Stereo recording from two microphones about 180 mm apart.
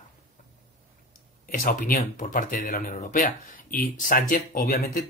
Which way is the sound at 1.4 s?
50° left (ahead or behind).